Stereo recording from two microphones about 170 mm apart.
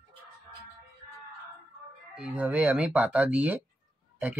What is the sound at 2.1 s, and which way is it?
Speech, 5° right (ahead or behind).